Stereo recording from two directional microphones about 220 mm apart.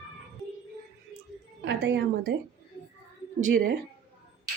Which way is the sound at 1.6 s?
50° right (ahead or behind).